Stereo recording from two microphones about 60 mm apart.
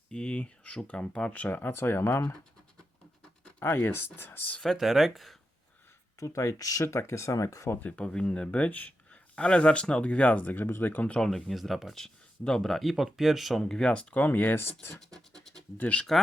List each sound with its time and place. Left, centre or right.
0.1 s speech: centre; by 2.3 s left
3.6 s speech: left
4.6 s speech: centre
6.1 s speech: left
6.8 s speech: left
7.9 s speech: centre
11.1 s speech: centre
13.6 s speech: centre
13.9 s speech: left
14.9 s scratch: centre
15.8 s speech: centre